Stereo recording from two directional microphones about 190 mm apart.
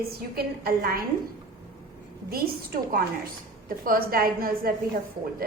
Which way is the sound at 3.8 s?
50° right (ahead or behind).